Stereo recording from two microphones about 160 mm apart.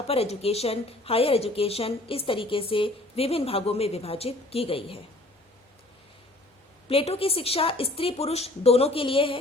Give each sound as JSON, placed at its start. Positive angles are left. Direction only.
{"t": 0.1, "sound": "a woman's voice", "side_deg": 40}
{"t": 6.8, "sound": "a woman's voice", "side_deg": 40}